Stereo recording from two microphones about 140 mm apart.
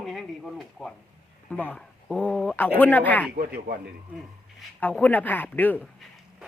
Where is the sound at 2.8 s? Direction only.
10° left (ahead or behind).